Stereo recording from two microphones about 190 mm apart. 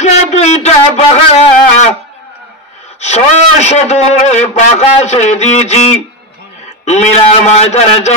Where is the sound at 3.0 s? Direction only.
35° left (ahead or behind).